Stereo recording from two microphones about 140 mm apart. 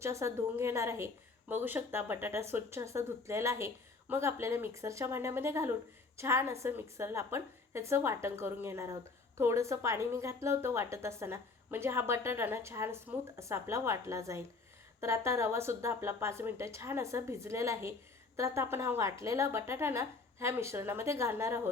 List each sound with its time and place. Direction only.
0.0 s a woman's voice: 20° right (ahead or behind)